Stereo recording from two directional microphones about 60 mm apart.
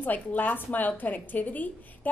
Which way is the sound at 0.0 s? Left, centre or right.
Left.